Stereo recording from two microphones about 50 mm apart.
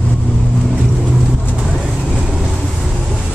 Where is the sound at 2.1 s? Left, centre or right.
Centre.